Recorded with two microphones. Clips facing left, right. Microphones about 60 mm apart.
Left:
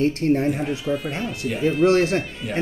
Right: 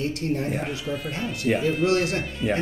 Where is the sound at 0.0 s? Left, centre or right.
Left.